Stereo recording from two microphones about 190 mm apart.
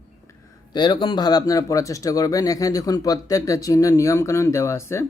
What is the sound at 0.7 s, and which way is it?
Mantra, 25° left (ahead or behind).